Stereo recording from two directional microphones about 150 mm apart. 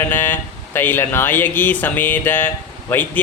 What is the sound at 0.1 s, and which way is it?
Speech, 15° left (ahead or behind).